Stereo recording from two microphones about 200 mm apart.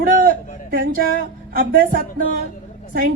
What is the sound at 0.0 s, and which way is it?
A woman's voice, 45° right (ahead or behind).